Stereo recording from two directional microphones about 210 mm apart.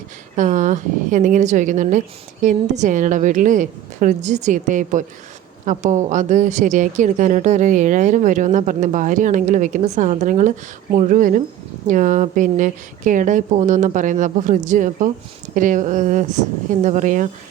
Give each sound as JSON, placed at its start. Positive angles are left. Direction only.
{"t": 0.3, "sound": "a woman's voice", "side_deg": -35}